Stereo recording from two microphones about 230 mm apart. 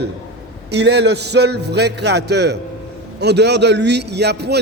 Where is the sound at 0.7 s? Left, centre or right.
Right.